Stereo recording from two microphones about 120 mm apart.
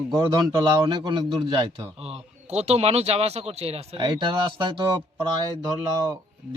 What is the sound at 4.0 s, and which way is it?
Speech, 40° right (ahead or behind).